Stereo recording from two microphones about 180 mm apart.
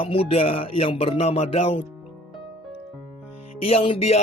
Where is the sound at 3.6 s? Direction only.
30° left (ahead or behind).